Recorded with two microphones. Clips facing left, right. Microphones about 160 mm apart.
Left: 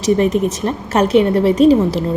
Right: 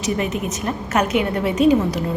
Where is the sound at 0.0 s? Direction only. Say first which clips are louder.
Left 8 dB; 35° left (ahead or behind).